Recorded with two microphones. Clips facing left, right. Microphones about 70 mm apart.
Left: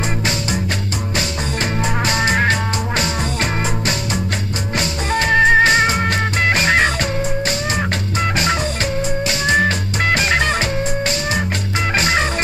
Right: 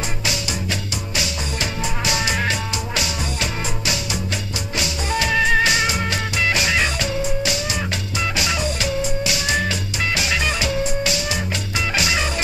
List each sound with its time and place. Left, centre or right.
2.0 s music: left
4.7 s music: left